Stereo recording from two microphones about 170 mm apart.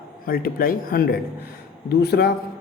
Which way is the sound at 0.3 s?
60° left (ahead or behind).